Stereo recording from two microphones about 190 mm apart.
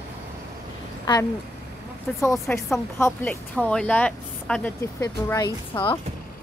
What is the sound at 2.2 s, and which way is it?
Speech, 15° left (ahead or behind).